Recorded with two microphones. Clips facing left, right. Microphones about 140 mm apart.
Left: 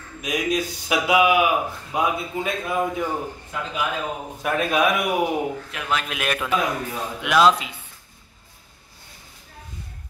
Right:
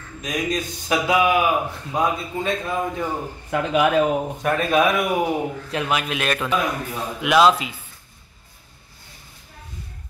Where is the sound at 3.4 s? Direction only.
70° right (ahead or behind).